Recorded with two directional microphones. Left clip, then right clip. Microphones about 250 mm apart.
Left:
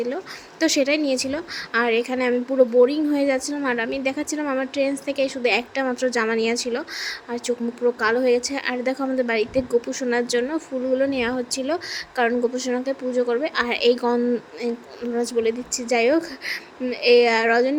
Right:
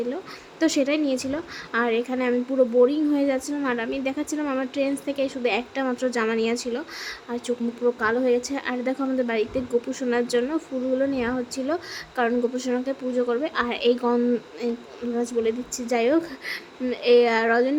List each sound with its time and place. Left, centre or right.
0.6 s a woman's voice: centre